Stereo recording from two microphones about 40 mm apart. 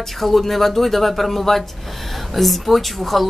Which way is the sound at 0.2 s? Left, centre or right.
Centre.